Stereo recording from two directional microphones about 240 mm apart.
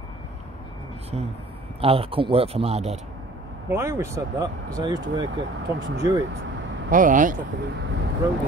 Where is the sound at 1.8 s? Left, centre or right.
Right.